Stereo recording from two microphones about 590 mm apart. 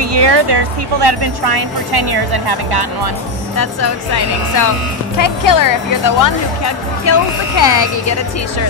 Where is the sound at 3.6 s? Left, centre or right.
Left.